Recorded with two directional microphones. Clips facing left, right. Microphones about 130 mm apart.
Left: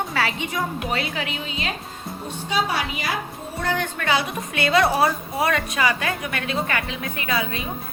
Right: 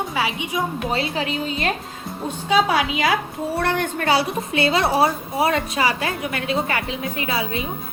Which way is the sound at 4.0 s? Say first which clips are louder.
Right 4 dB; 40° right (ahead or behind).